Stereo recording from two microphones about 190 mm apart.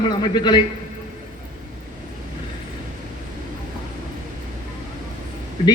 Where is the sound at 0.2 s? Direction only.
25° left (ahead or behind).